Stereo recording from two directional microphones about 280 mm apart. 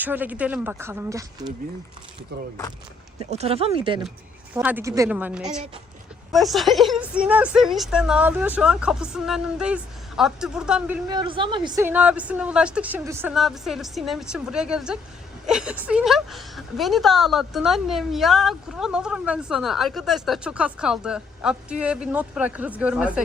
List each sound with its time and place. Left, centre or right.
0.0 s speech: centre
3.2 s a woman's voice: right; by 23.2 s centre